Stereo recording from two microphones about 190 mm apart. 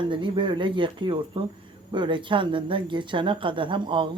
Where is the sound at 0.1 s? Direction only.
25° right (ahead or behind).